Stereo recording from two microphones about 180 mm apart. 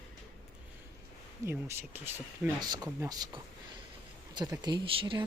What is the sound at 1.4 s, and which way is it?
Speech, 15° right (ahead or behind).